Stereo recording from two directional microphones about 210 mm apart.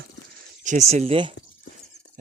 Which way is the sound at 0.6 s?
30° right (ahead or behind).